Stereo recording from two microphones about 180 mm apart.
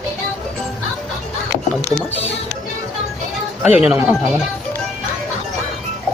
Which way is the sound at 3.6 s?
5° right (ahead or behind).